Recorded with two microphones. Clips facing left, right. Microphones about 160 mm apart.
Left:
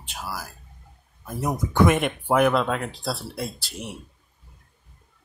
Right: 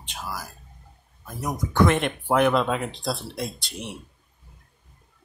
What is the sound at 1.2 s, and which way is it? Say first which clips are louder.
Speech: left 3 dB; 30° left (ahead or behind).